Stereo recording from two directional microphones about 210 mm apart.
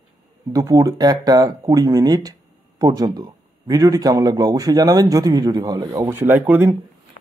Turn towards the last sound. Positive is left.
turn(degrees=-10)  # may be behind; listen again after turning